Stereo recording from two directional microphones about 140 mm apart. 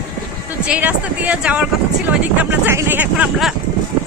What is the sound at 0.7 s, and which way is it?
Speech, 10° right (ahead or behind).